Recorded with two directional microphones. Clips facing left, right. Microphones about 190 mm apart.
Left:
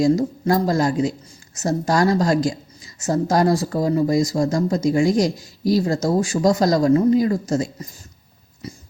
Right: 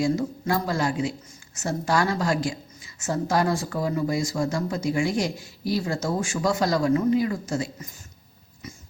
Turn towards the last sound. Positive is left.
turn(degrees=40)  # may be behind; listen again after turning